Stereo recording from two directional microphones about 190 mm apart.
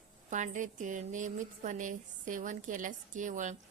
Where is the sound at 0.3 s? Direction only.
40° right (ahead or behind).